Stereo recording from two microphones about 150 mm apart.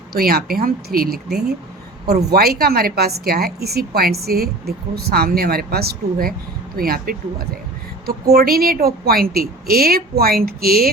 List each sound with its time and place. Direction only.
0.1 s a woman's voice: 90° right
8.0 s a woman's voice: 90° right